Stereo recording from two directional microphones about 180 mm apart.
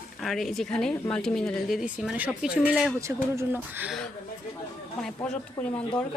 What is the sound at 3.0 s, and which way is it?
Speech, 15° right (ahead or behind).